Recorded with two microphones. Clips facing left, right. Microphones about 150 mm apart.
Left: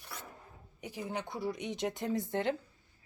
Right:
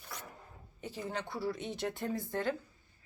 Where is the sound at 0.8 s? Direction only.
15° left (ahead or behind).